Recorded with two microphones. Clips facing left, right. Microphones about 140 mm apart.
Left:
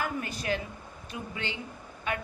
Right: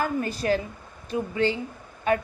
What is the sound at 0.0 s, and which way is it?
A woman's voice, 35° right (ahead or behind).